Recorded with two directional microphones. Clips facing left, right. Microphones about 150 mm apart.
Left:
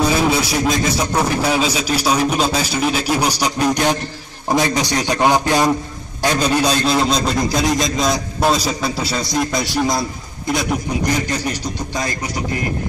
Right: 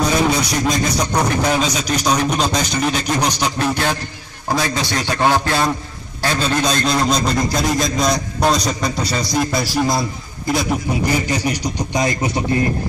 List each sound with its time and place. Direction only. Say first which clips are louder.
0.3 s a man's voice: left 1 dB; 5° left (ahead or behind); by 12.3 s 20° right (ahead or behind)